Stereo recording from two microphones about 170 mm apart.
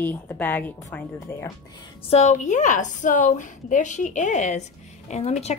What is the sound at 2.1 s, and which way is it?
A woman's voice, 40° left (ahead or behind).